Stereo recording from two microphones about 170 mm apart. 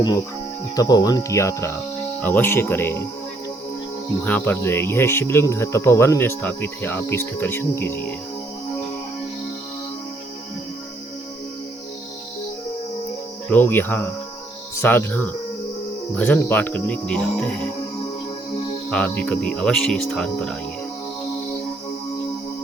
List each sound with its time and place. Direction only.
0.8 s speech: 20° left (ahead or behind)
4.2 s speech: 10° left (ahead or behind)
13.5 s speech: 10° left (ahead or behind)
18.9 s speech: 5° left (ahead or behind)